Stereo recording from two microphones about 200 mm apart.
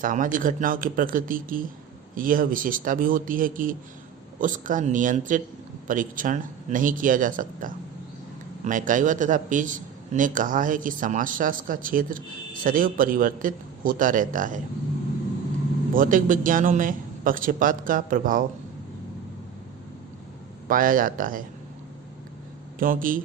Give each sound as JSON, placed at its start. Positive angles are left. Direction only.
{"t": 0.0, "sound": "a man's voice", "side_deg": -40}
{"t": 16.0, "sound": "a man's voice", "side_deg": -40}
{"t": 20.7, "sound": "a man's voice", "side_deg": -45}
{"t": 22.8, "sound": "a man's voice", "side_deg": -45}